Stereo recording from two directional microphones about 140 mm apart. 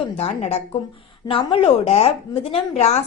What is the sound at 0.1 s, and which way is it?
Speech, 45° left (ahead or behind).